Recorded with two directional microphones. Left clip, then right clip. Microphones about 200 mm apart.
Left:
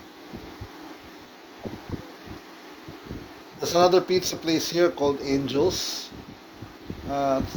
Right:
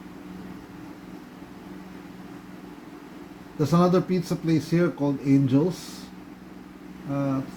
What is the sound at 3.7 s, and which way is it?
Speech, 55° left (ahead or behind).